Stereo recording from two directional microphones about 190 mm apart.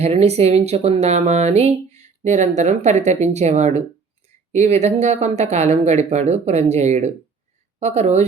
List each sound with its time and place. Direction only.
0.0 s speech: 35° right (ahead or behind)